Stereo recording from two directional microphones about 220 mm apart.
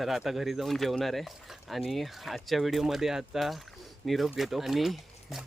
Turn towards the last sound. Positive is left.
turn(degrees=0)  # may be behind; listen again after turning